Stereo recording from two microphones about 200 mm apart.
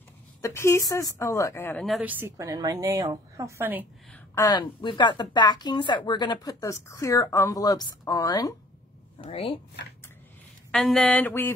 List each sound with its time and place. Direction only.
0.4 s speech: 15° left (ahead or behind)
1.9 s a woman's voice: 5° right (ahead or behind)
4.1 s a woman's voice: 15° left (ahead or behind)
10.7 s speech: centre (ahead or behind)